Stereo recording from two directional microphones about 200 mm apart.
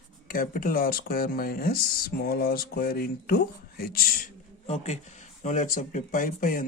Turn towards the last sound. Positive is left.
turn(degrees=45)  # may be behind; listen again after turning